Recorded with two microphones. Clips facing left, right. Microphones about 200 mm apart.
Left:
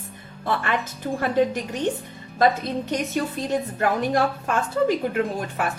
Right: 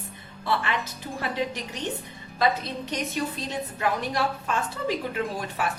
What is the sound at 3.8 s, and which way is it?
Speech, 55° left (ahead or behind).